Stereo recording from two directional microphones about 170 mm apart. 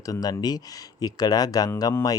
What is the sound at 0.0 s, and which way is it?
Speech, 20° left (ahead or behind).